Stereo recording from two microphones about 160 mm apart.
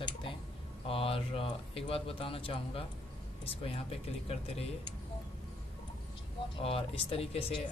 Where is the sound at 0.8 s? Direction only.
35° left (ahead or behind).